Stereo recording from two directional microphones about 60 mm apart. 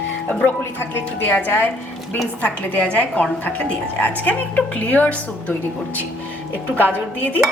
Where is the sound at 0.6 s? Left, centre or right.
Left.